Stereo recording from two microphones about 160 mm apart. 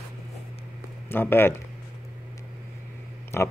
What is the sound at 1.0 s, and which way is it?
Speech, 15° left (ahead or behind).